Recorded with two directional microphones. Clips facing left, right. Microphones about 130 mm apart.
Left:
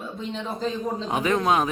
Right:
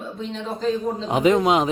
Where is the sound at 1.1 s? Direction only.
20° right (ahead or behind).